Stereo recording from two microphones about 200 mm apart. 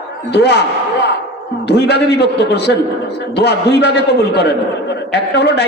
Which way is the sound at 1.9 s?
55° left (ahead or behind).